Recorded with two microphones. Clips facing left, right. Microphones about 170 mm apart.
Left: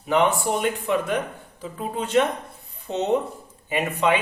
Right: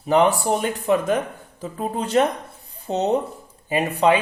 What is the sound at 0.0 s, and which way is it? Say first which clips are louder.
Speech: right 3 dB; 35° right (ahead or behind).